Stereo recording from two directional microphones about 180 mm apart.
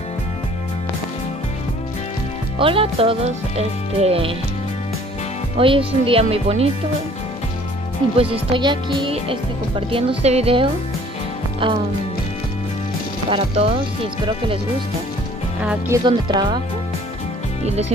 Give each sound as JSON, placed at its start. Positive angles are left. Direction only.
{"t": 2.6, "sound": "speech", "side_deg": -30}
{"t": 5.6, "sound": "speech", "side_deg": -30}
{"t": 8.2, "sound": "speech", "side_deg": -30}
{"t": 13.3, "sound": "speech", "side_deg": -30}
{"t": 15.9, "sound": "speech", "side_deg": -25}